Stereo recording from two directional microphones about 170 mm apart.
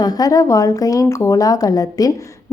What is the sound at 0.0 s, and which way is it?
A woman's voice, 20° left (ahead or behind).